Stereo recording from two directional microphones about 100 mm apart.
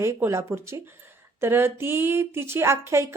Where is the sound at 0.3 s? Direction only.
30° right (ahead or behind).